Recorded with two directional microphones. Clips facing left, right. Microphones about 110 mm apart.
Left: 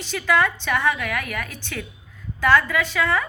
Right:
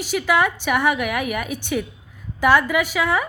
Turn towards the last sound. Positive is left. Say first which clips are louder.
# right 2 dB
turn(degrees=-10)  # may be behind; listen again after turning